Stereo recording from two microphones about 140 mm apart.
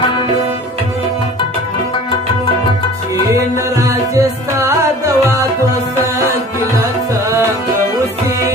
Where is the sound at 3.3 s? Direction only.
20° right (ahead or behind).